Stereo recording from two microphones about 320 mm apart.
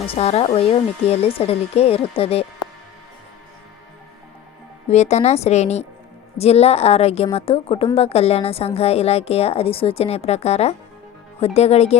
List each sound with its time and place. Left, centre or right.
0.0 s speech: centre
4.9 s a woman's voice: left